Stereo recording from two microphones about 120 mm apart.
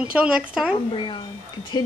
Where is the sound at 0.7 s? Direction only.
45° left (ahead or behind).